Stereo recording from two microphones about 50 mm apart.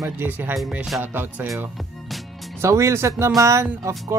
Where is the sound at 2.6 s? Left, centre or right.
Right.